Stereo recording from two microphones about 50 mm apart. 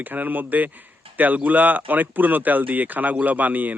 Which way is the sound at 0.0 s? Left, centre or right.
Right.